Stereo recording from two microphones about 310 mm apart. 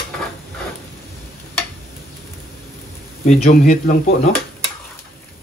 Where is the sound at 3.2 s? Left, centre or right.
Left.